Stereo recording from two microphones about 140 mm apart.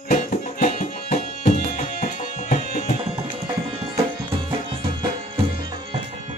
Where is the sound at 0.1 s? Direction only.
65° left (ahead or behind).